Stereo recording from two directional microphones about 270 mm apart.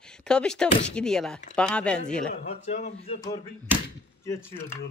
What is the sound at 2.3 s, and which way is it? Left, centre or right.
Speech, left.